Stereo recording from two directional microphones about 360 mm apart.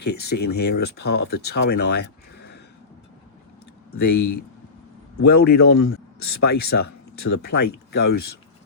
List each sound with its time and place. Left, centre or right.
0.0 s speech: left
5.1 s speech: left
5.6 s speech: left
6.4 s speech: left